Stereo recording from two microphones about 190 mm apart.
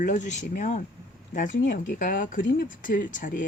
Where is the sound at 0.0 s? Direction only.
40° left (ahead or behind).